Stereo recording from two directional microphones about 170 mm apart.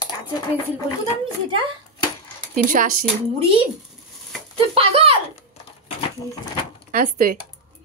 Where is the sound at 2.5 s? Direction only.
55° right (ahead or behind).